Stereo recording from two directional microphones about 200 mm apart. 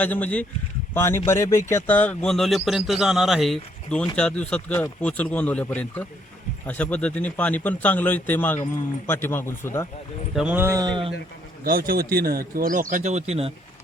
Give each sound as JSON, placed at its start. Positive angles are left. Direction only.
{"t": 0.0, "sound": "a man's voice", "side_deg": 5}
{"t": 10.3, "sound": "speech", "side_deg": -5}
{"t": 11.6, "sound": "speech", "side_deg": -45}